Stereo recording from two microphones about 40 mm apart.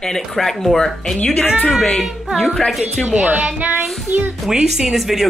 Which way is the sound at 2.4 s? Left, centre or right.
Left.